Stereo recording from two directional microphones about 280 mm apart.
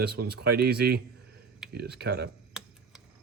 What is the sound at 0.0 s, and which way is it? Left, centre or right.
Speech, right.